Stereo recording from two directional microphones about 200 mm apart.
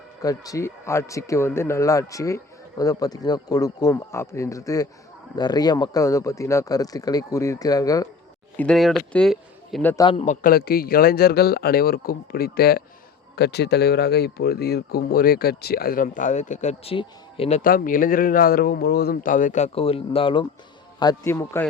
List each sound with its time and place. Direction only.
0.2 s a man's voice: 15° left (ahead or behind)
8.5 s a man's voice: 5° left (ahead or behind)
9.9 s a man's voice: 25° left (ahead or behind)
10.4 s speech: 50° left (ahead or behind); by 17.6 s 30° left (ahead or behind)
17.6 s a man's voice: 45° left (ahead or behind); by 21.7 s 10° left (ahead or behind)